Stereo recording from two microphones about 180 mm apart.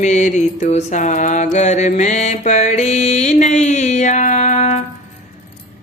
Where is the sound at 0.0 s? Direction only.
40° left (ahead or behind).